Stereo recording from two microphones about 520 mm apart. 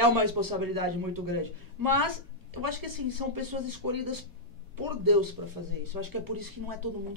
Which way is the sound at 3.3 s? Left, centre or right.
Right.